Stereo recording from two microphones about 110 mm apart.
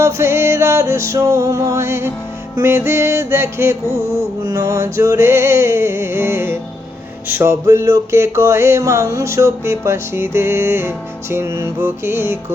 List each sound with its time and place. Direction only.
0.0 s music: 25° right (ahead or behind)